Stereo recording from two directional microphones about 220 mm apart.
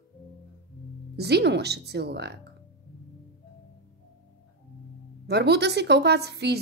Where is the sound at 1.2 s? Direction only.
50° right (ahead or behind).